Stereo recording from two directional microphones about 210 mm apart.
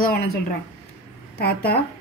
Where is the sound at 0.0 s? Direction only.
45° left (ahead or behind).